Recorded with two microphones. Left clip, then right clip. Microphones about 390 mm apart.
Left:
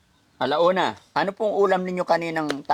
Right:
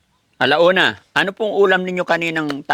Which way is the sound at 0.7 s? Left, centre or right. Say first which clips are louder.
Right 7 dB; right.